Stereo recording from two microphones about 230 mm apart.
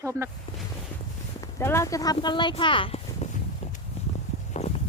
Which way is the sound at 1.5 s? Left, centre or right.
Centre.